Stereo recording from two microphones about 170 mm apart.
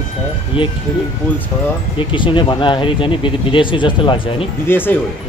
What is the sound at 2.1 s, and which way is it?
Speech, 30° left (ahead or behind).